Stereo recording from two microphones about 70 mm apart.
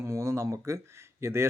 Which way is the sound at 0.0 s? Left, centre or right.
Right.